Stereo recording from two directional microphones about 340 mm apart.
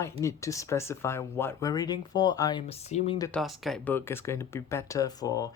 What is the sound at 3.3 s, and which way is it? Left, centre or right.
Speech, centre.